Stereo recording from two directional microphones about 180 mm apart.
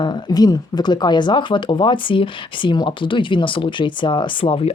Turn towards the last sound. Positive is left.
turn(degrees=30)  # may be behind; listen again after turning